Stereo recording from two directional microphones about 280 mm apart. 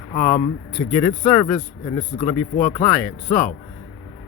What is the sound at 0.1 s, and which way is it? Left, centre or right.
Speech, left.